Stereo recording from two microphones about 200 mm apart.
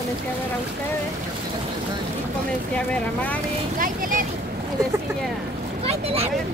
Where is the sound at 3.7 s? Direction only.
45° right (ahead or behind).